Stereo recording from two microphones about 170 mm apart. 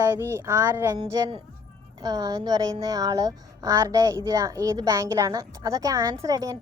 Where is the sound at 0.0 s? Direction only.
15° right (ahead or behind).